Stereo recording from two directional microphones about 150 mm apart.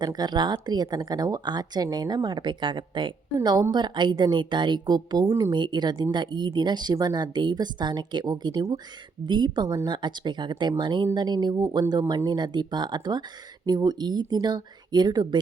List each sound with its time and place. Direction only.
0.0 s a woman's voice: 30° right (ahead or behind)